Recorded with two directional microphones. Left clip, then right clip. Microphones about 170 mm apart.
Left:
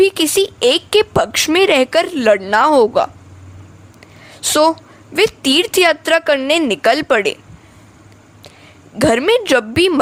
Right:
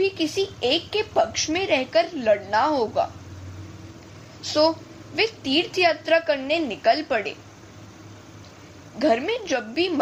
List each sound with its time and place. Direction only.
0.0 s a woman's voice: 55° left (ahead or behind)
4.4 s a woman's voice: 65° left (ahead or behind)
9.0 s a woman's voice: 55° left (ahead or behind)